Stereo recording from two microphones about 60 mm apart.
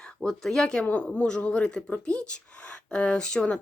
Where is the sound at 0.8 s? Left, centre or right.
Left.